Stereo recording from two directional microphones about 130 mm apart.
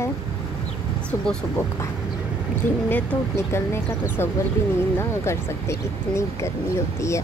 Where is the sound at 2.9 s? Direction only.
15° left (ahead or behind).